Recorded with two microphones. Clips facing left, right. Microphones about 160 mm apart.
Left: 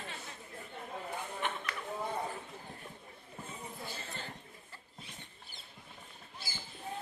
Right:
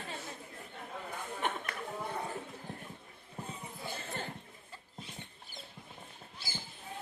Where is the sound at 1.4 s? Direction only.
45° right (ahead or behind).